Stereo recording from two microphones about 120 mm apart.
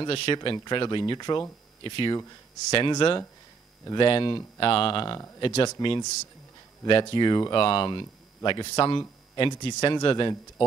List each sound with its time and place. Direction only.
0.0 s speech: 45° left (ahead or behind)